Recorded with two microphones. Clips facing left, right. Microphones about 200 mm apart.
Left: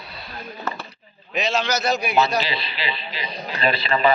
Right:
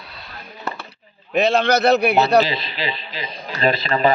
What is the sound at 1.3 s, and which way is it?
Speech, 55° right (ahead or behind).